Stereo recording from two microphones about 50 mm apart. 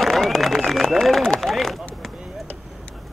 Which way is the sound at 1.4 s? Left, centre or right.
Centre.